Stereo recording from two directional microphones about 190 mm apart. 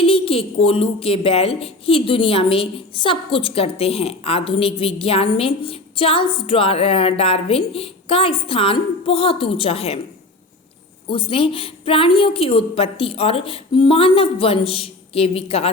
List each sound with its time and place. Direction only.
0.0 s speech: 30° left (ahead or behind)
11.1 s speech: 30° left (ahead or behind)